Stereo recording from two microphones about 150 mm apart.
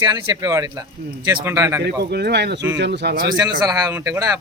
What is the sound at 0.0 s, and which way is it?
Speech, 25° right (ahead or behind).